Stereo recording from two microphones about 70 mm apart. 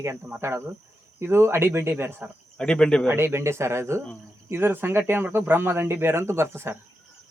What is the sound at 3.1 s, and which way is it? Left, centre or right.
Speech, right.